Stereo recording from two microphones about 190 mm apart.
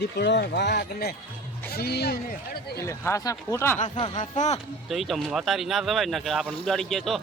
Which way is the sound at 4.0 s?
30° left (ahead or behind).